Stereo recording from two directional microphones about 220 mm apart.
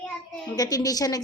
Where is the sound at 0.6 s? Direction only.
15° left (ahead or behind).